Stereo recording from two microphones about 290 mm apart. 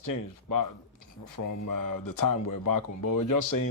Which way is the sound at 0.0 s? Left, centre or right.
Left.